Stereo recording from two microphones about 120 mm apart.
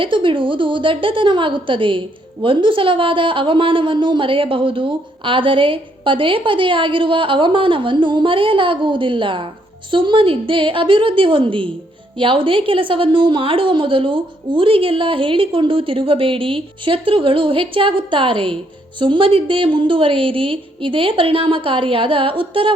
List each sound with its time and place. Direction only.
0.0 s a woman's voice: 45° right (ahead or behind)